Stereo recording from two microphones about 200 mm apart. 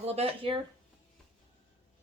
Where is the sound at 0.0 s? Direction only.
30° right (ahead or behind).